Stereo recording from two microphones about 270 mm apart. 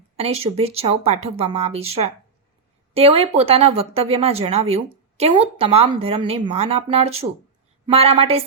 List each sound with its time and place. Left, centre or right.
0.2 s speech: right